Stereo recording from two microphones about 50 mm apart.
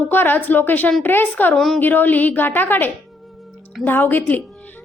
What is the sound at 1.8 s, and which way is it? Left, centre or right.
A woman's voice, left.